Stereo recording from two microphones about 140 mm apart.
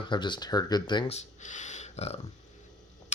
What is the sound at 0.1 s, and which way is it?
Speech, 35° left (ahead or behind).